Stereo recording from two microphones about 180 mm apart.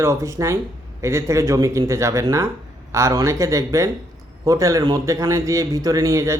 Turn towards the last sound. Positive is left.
turn(degrees=-15)  # may be behind; listen again after turning